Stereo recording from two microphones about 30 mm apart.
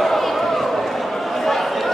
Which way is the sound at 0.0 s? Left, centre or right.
Centre.